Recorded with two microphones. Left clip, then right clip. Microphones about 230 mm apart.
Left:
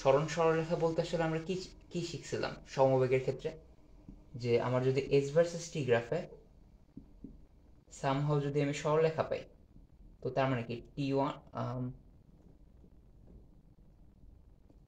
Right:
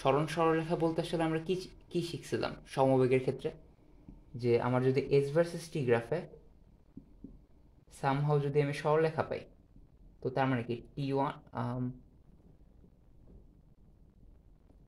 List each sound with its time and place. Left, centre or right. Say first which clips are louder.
0.0 s speech: left 1 dB; right
8.0 s speech: right 2 dB; right